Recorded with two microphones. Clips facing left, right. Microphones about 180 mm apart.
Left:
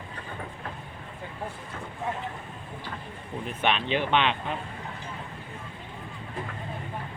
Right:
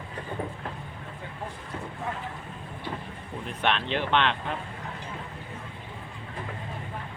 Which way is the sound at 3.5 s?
5° left (ahead or behind).